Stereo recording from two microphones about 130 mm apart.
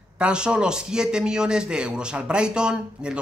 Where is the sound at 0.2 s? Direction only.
5° right (ahead or behind).